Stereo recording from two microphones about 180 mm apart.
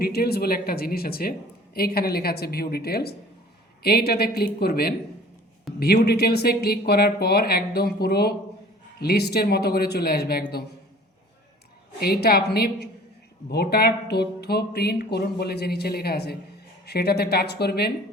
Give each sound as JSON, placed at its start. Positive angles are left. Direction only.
{"t": 0.0, "sound": "speech", "side_deg": 60}
{"t": 11.9, "sound": "speech", "side_deg": 60}